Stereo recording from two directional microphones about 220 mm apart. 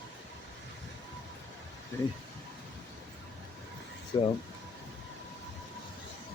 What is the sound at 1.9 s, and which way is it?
Speech, 15° left (ahead or behind).